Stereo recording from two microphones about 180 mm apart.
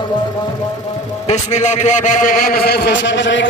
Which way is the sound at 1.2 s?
40° left (ahead or behind).